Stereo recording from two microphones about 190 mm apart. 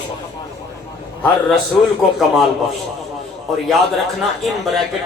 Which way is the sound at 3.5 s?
Centre (ahead or behind).